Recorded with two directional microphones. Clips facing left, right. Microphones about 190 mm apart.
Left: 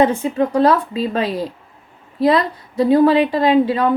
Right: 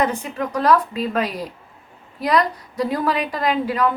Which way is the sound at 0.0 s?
25° left (ahead or behind).